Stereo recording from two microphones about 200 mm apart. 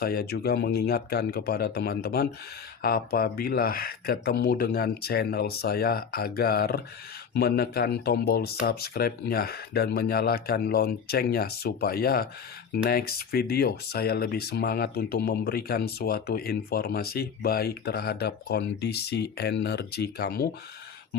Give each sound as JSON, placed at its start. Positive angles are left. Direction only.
{"t": 0.0, "sound": "speech", "side_deg": 50}